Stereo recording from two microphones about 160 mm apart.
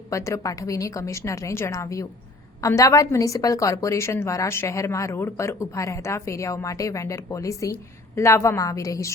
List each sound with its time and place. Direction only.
0.1 s a woman's voice: 20° left (ahead or behind)